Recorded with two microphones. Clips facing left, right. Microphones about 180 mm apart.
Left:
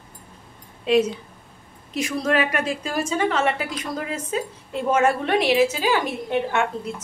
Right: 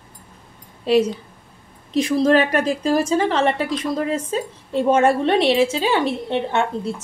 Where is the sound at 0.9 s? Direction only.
35° right (ahead or behind).